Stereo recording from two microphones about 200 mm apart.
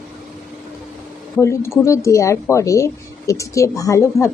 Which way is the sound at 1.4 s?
15° left (ahead or behind).